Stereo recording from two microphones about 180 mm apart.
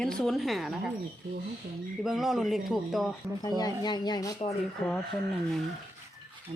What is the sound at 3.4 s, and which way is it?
Speech, 20° left (ahead or behind).